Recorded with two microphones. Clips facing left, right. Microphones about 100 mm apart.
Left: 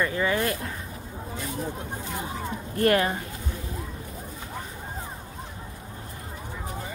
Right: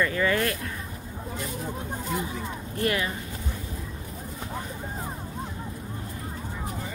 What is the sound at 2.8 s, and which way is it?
Speech, 50° left (ahead or behind).